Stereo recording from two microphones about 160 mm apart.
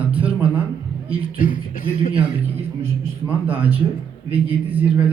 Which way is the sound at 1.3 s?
60° left (ahead or behind).